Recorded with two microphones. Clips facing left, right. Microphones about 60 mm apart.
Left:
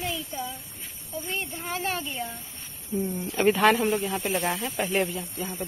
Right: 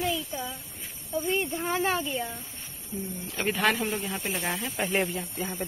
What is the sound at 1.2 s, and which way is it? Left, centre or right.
Speech, centre.